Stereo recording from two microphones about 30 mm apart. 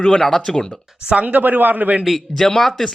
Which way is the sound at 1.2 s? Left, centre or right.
Right.